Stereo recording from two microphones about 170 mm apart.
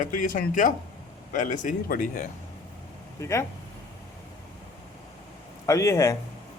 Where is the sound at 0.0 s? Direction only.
50° left (ahead or behind).